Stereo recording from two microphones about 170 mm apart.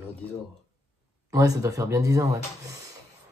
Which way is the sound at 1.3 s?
20° right (ahead or behind).